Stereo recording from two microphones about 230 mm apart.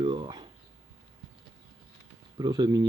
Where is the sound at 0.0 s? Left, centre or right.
Right.